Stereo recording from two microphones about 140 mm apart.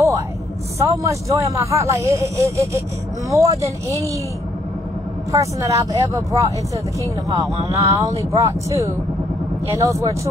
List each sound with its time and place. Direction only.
0.7 s speech: 20° right (ahead or behind)
5.3 s speech: 20° right (ahead or behind)
7.7 s speech: 20° right (ahead or behind)